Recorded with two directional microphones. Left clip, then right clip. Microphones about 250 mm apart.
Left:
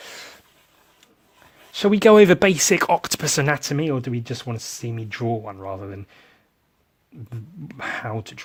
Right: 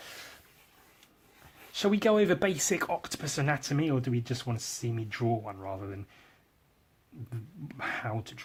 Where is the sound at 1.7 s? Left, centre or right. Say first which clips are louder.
Left 12 dB; left.